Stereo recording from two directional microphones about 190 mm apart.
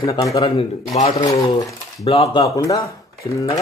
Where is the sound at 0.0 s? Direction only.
20° left (ahead or behind).